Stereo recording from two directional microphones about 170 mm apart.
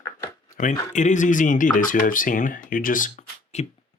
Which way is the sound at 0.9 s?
45° left (ahead or behind).